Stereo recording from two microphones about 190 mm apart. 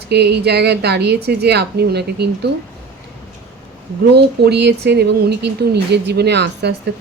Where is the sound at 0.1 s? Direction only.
60° right (ahead or behind).